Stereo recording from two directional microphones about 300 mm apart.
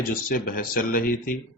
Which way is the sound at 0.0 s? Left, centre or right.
Left.